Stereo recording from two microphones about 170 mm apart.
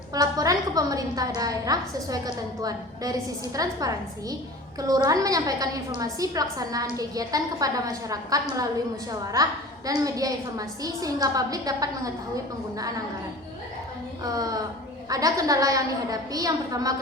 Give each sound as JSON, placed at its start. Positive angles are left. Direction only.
{"t": 0.1, "sound": "a woman's voice", "side_deg": -20}
{"t": 14.3, "sound": "a woman's voice", "side_deg": -20}